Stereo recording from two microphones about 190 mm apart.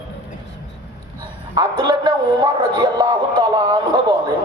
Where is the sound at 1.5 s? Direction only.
25° right (ahead or behind).